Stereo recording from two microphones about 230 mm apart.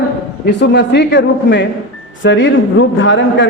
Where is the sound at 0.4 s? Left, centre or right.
Left.